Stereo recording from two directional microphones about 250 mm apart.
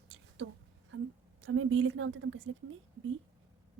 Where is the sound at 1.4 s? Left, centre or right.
Right.